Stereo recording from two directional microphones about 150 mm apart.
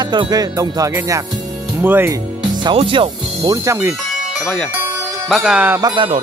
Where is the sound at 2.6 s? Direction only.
35° right (ahead or behind); by 3.9 s 20° right (ahead or behind).